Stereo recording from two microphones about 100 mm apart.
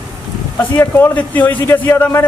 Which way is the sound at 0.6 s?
20° left (ahead or behind).